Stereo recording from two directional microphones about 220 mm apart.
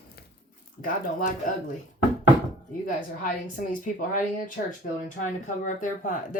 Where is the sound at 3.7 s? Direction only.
35° left (ahead or behind).